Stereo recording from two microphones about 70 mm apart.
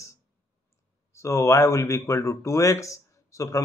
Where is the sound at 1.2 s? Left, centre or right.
Left.